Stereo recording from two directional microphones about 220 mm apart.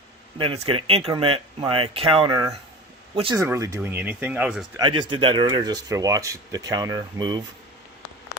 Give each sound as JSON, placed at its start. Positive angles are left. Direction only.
{"t": 0.3, "sound": "speech", "side_deg": -25}
{"t": 4.8, "sound": "speech", "side_deg": -20}